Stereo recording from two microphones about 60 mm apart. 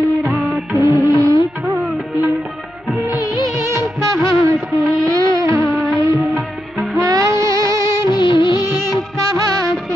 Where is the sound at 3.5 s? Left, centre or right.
Right.